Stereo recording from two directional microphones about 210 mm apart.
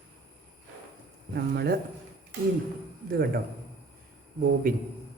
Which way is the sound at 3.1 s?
45° right (ahead or behind).